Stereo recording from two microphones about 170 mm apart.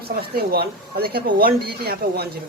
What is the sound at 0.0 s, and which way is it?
Speech, 65° right (ahead or behind).